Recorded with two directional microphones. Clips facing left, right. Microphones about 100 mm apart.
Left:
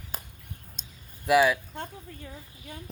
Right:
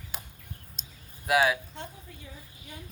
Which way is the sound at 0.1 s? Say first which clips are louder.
Left 3 dB; 40° left (ahead or behind).